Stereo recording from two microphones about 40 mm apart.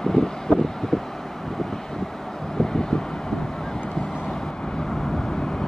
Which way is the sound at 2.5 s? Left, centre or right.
Centre.